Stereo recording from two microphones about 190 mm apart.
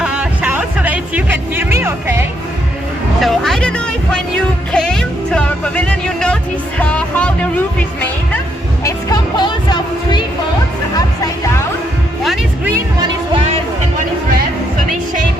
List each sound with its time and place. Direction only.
0.0 s music: 5° right (ahead or behind)
3.2 s speech: centre (ahead or behind)
8.8 s speech: 20° left (ahead or behind)
12.2 s music: centre (ahead or behind)
13.3 s music: 30° right (ahead or behind)